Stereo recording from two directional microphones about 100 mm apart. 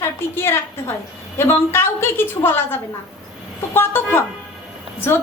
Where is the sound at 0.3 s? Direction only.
25° left (ahead or behind).